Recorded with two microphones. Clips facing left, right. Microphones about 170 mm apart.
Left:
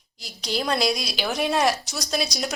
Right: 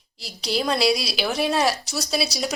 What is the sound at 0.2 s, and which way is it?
A woman's voice, centre (ahead or behind).